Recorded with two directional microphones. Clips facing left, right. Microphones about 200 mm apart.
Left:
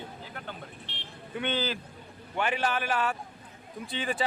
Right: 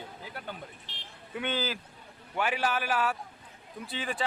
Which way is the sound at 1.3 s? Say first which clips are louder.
Left 2 dB; 5° right (ahead or behind).